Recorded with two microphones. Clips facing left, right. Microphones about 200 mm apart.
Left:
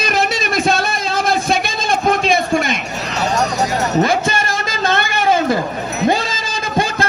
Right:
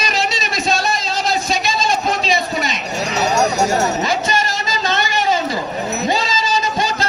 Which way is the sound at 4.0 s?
55° left (ahead or behind).